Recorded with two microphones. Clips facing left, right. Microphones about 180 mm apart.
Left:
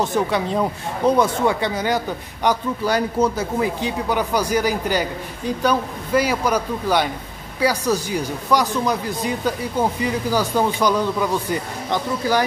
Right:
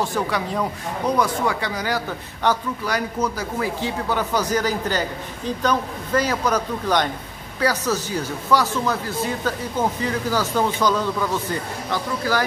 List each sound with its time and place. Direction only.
0.0 s a man's voice: 20° left (ahead or behind)